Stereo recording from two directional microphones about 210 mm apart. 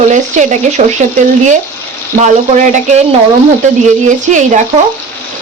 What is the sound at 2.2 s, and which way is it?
Speech, 35° right (ahead or behind).